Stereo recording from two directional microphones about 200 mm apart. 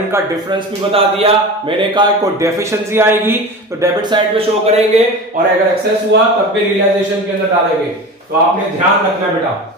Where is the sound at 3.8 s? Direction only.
25° right (ahead or behind).